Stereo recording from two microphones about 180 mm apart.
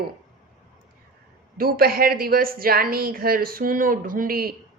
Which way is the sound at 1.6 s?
55° right (ahead or behind).